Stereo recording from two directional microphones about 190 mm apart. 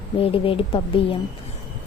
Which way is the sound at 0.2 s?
30° left (ahead or behind).